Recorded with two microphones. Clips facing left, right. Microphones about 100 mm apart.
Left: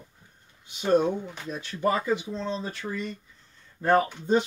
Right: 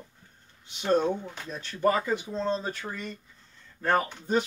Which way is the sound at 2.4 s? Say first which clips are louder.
Right 2 dB; 40° right (ahead or behind).